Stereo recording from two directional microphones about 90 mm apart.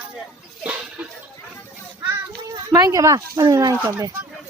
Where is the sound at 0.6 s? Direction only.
15° right (ahead or behind).